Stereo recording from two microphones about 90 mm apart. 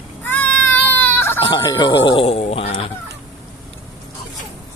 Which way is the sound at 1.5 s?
50° left (ahead or behind).